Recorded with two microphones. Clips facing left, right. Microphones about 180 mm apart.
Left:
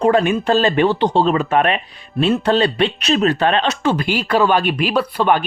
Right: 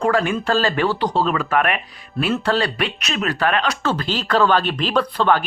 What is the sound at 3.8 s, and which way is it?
Speech, 15° left (ahead or behind).